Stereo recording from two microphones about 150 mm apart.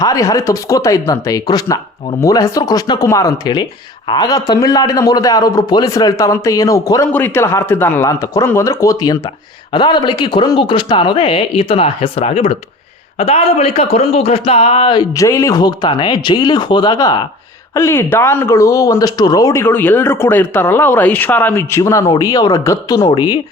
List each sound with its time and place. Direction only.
0.0 s a man's voice: 25° left (ahead or behind)
17.7 s a man's voice: 15° left (ahead or behind)